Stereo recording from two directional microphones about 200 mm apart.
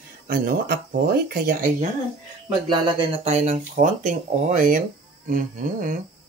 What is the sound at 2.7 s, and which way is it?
Speech, 25° right (ahead or behind).